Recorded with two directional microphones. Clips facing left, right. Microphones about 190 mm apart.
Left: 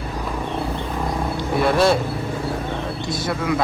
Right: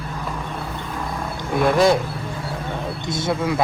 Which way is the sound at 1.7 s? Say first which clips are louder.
Right 1 dB; 15° right (ahead or behind).